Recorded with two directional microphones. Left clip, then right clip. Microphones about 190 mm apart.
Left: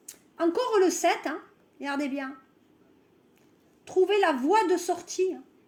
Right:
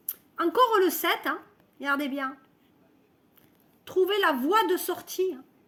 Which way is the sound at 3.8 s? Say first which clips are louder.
Left 1 dB; 40° right (ahead or behind).